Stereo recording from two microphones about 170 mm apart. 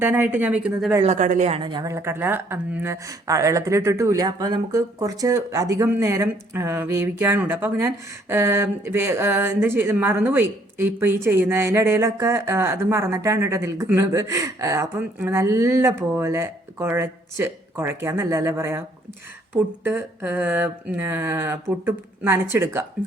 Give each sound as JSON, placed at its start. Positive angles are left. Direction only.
{"t": 0.0, "sound": "speech", "side_deg": -10}
{"t": 1.0, "sound": "a woman's voice", "side_deg": -45}
{"t": 1.9, "sound": "speech", "side_deg": -15}